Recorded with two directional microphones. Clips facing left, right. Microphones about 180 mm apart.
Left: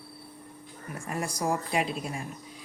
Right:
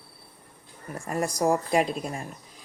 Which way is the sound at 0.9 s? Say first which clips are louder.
Right 5 dB; 40° right (ahead or behind).